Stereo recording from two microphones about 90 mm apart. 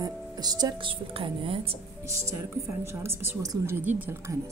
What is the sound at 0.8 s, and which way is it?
Speech, 75° right (ahead or behind).